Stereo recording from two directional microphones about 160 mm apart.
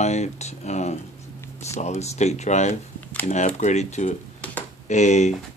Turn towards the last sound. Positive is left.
turn(degrees=45)  # may be behind; listen again after turning